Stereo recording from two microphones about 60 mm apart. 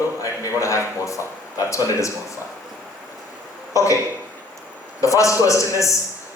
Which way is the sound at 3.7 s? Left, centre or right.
Left.